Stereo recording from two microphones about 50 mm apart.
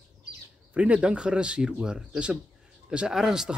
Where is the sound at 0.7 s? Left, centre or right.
Right.